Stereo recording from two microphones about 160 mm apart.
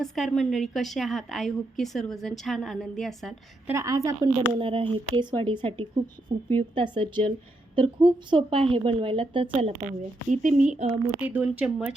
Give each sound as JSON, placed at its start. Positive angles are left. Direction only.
{"t": 0.0, "sound": "a woman's voice", "side_deg": 5}
{"t": 3.7, "sound": "a woman's voice", "side_deg": -20}
{"t": 4.4, "sound": "a woman's voice", "side_deg": -35}
{"t": 11.2, "sound": "speech", "side_deg": -10}